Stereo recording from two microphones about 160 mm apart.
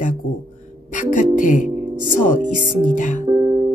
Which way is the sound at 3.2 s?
25° right (ahead or behind).